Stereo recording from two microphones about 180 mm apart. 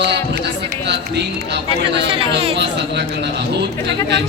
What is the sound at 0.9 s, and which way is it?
A man's voice, 70° right (ahead or behind).